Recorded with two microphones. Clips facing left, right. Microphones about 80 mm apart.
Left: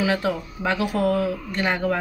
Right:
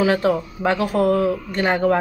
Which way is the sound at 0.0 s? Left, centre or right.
Right.